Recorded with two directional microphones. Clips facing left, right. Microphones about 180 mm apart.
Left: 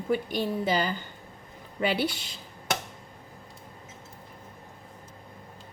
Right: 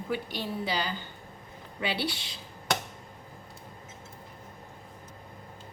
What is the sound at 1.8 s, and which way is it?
Speech, 50° left (ahead or behind).